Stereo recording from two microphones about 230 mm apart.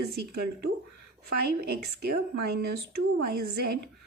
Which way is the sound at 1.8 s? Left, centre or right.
Right.